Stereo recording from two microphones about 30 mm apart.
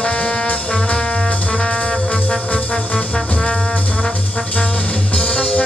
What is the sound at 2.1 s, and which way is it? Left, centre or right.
Trombone, centre.